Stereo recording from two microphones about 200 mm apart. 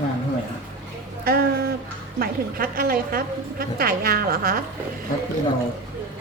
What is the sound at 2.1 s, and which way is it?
A woman's voice, 45° right (ahead or behind).